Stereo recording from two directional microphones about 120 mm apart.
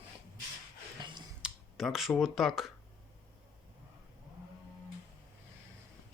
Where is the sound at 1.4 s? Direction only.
Centre (ahead or behind).